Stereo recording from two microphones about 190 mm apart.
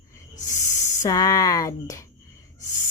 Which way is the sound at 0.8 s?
20° left (ahead or behind).